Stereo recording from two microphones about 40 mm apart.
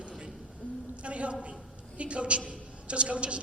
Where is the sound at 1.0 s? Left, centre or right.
Right.